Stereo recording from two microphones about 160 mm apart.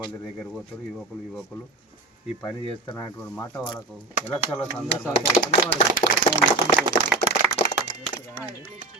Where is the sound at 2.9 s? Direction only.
15° left (ahead or behind).